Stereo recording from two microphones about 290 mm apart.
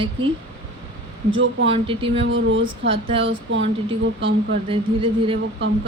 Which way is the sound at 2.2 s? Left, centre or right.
Right.